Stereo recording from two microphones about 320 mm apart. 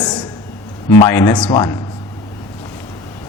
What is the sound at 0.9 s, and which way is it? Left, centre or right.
Speech, centre.